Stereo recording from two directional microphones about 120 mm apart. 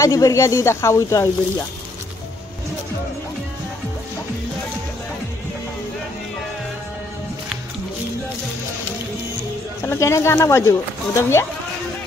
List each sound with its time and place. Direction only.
0.0 s speech: 25° left (ahead or behind)
9.8 s speech: 25° left (ahead or behind)